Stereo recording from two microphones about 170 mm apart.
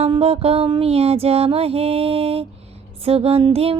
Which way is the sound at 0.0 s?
35° right (ahead or behind).